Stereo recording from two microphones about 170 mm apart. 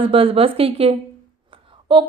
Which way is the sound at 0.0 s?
35° right (ahead or behind).